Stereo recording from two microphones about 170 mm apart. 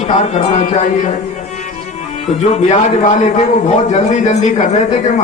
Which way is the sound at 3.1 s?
45° left (ahead or behind).